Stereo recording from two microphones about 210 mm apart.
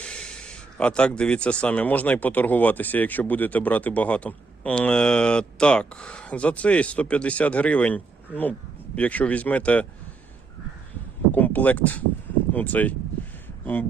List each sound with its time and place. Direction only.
0.0 s speech: 5° left (ahead or behind)
11.3 s speech: 10° left (ahead or behind)